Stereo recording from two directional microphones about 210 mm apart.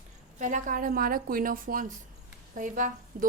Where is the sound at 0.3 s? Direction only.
35° right (ahead or behind).